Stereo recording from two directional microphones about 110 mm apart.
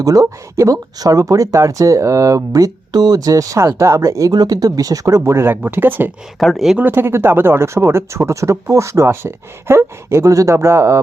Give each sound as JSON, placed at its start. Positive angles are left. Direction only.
{"t": 0.0, "sound": "speech", "side_deg": -30}
{"t": 6.4, "sound": "speech", "side_deg": 0}
{"t": 6.8, "sound": "speech", "side_deg": -20}